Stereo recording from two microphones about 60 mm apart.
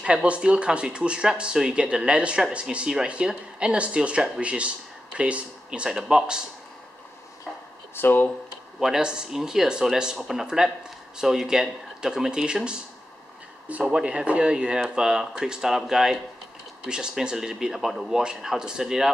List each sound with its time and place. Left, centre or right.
0.0 s speech: centre
7.9 s speech: left
8.7 s speech: centre
13.8 s speech: centre